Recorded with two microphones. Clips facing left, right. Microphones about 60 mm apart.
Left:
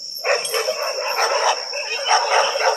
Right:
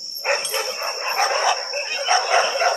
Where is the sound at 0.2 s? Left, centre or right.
Centre.